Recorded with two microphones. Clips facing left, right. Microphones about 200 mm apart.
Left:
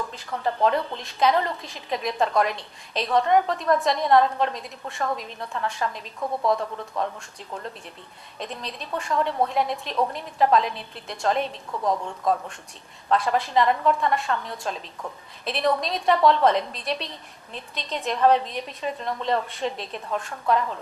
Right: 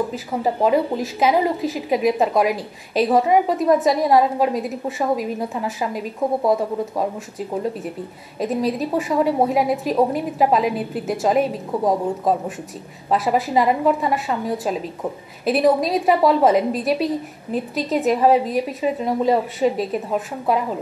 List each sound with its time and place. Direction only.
0.1 s a woman's voice: 5° right (ahead or behind)
6.2 s a woman's voice: 30° right (ahead or behind)
7.5 s a woman's voice: 10° right (ahead or behind)
11.7 s a woman's voice: 30° right (ahead or behind)
13.1 s a woman's voice: 5° right (ahead or behind)